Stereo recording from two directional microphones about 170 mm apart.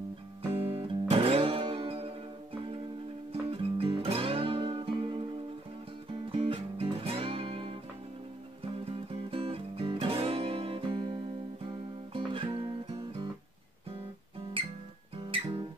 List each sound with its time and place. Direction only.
0.5 s guitar: 15° right (ahead or behind)
0.8 s music: 35° right (ahead or behind)
3.4 s music: 35° right (ahead or behind)
6.2 s music: 30° right (ahead or behind)
9.3 s music: 35° right (ahead or behind)
15.1 s guitar: 30° right (ahead or behind)